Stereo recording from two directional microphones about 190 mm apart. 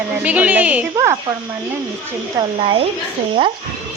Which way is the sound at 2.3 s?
30° right (ahead or behind).